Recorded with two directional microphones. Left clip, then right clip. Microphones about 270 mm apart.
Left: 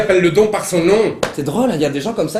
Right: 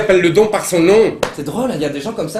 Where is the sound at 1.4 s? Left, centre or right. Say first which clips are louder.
Left 3 dB; left.